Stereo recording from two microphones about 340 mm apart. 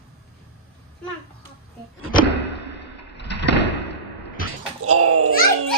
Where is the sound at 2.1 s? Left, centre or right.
Left.